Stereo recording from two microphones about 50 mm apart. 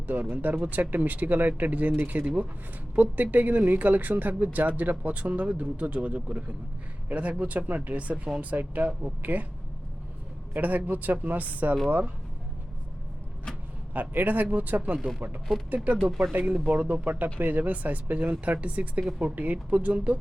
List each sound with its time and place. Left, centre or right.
0.1 s speech: right
10.5 s speech: right
13.9 s speech: right